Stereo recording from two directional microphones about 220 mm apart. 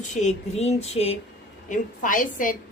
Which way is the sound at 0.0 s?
30° left (ahead or behind).